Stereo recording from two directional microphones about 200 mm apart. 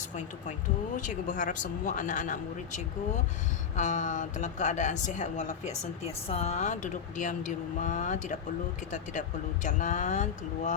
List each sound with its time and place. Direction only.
0.9 s speech: 40° left (ahead or behind)
9.6 s speech: 40° left (ahead or behind)